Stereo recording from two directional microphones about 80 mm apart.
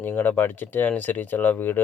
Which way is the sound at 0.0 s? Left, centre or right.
Left.